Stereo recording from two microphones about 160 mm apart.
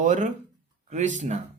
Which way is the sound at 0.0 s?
50° right (ahead or behind).